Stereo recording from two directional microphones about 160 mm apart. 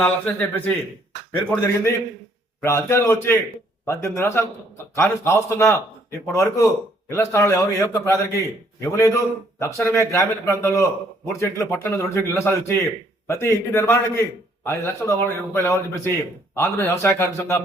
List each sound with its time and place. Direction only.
0.0 s a man's voice: 10° left (ahead or behind)